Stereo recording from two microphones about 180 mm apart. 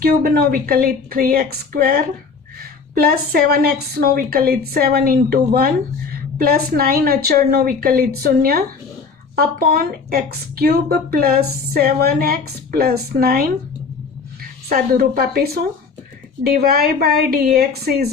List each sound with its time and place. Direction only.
0.0 s a woman's voice: 55° right (ahead or behind)
14.7 s a woman's voice: 55° right (ahead or behind)